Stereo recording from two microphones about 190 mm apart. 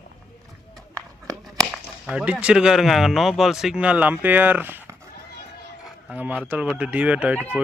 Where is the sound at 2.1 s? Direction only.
5° right (ahead or behind).